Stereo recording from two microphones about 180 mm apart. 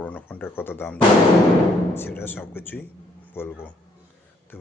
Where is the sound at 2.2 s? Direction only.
10° left (ahead or behind).